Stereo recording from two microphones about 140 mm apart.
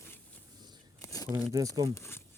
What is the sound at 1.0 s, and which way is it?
Crumpling, 25° left (ahead or behind).